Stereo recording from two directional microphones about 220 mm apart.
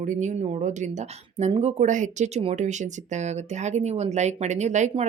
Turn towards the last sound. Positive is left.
turn(degrees=-30)  # may be behind; listen again after turning